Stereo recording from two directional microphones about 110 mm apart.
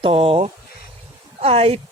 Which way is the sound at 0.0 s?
60° right (ahead or behind).